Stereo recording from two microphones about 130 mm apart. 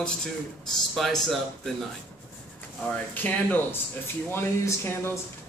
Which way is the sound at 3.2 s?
15° left (ahead or behind).